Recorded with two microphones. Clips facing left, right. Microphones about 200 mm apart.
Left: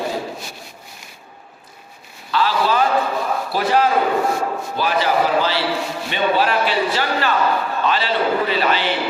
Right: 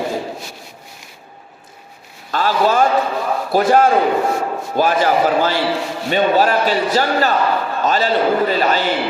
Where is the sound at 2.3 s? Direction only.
45° right (ahead or behind).